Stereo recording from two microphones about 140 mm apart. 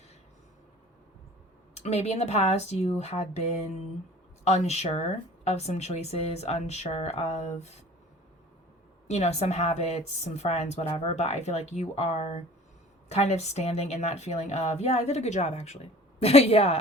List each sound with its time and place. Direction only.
1.7 s a woman's voice: 50° left (ahead or behind)
4.4 s a woman's voice: 50° left (ahead or behind)
9.0 s a woman's voice: 55° left (ahead or behind)